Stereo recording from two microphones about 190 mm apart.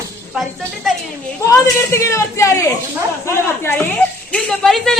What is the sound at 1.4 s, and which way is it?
A man's voice, 15° left (ahead or behind).